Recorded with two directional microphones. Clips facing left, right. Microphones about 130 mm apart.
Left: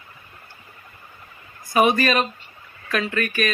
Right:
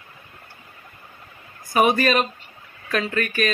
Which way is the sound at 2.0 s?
35° right (ahead or behind).